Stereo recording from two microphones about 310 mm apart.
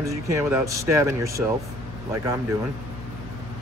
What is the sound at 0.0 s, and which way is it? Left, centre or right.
Speech, centre.